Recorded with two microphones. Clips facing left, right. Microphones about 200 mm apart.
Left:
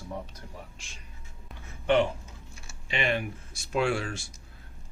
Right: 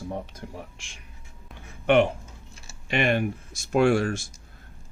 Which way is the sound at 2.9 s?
55° right (ahead or behind).